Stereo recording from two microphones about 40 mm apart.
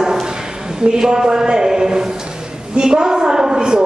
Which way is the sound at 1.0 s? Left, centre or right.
Centre.